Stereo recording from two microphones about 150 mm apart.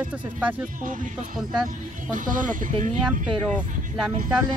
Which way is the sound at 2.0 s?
60° right (ahead or behind).